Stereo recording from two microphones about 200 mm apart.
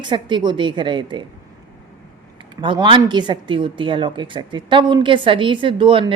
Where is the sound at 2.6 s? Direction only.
25° right (ahead or behind).